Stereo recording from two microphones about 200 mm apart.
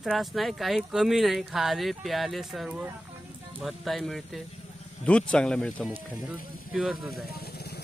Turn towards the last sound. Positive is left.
turn(degrees=55)  # may be behind; listen again after turning